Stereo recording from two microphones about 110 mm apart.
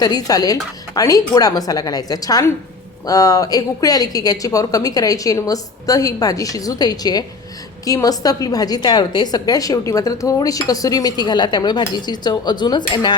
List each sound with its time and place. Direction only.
0.0 s a woman's voice: 35° left (ahead or behind)